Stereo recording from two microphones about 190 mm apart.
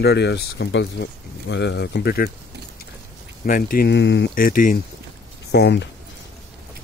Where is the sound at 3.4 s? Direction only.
45° left (ahead or behind).